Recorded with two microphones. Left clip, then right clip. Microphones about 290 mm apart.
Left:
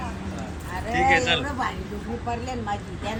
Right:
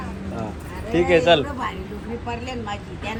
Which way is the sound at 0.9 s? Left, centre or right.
Centre.